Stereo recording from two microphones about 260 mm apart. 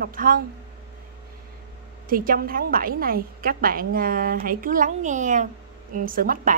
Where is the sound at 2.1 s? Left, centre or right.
Right.